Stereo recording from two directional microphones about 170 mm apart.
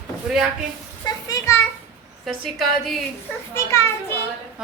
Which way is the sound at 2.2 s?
Centre (ahead or behind).